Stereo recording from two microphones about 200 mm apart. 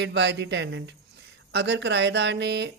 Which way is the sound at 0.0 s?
60° right (ahead or behind).